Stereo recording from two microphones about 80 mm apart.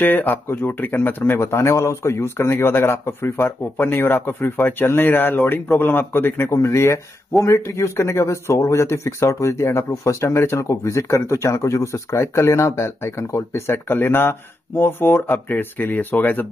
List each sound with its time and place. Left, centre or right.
0.0 s speech: left